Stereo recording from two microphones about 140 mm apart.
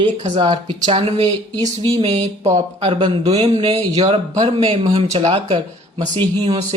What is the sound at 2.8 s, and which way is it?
Speech, 35° right (ahead or behind).